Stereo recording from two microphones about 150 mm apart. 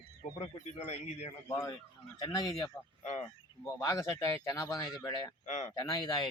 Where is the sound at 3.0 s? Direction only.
50° left (ahead or behind).